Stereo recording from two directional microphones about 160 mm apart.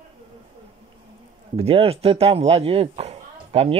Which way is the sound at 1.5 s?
40° right (ahead or behind).